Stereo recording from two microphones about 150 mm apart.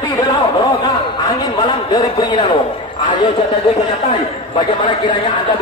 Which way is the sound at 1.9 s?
30° left (ahead or behind).